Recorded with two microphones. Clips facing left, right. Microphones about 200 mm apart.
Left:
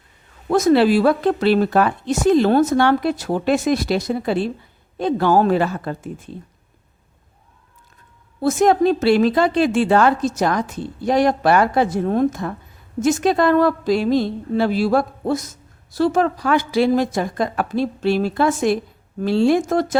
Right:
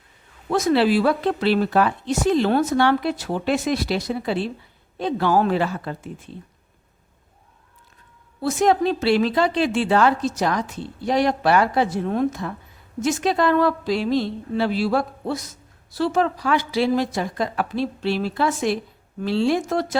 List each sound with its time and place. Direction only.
0.5 s a woman's voice: 45° left (ahead or behind)
8.4 s a woman's voice: 45° left (ahead or behind)